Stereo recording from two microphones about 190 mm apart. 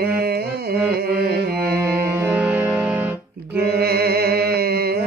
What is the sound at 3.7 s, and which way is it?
Mantra, 55° right (ahead or behind).